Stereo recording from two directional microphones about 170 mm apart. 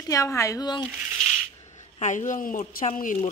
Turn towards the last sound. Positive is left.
turn(degrees=50)  # may be behind; listen again after turning